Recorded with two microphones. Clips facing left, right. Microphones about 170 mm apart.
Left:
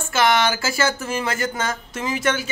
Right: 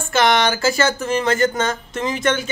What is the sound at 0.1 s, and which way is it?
Speech, 5° left (ahead or behind).